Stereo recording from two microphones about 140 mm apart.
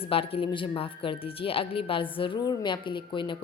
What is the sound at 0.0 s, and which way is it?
A woman's voice, 40° left (ahead or behind).